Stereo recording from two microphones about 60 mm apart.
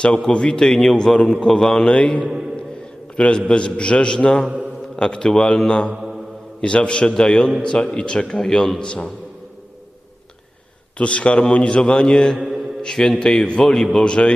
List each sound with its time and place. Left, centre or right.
0.0 s a man's voice: centre
2.0 s a man's voice: left
5.9 s mantra: centre
6.6 s a man's voice: centre
10.9 s a man's voice: centre